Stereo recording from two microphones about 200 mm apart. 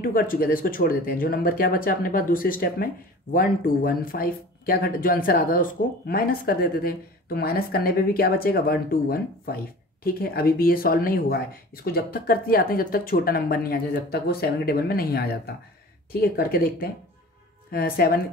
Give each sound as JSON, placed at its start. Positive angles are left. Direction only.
{"t": 0.0, "sound": "speech", "side_deg": 45}